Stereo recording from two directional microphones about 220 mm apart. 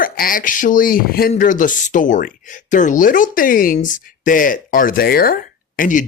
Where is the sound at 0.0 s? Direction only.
40° left (ahead or behind).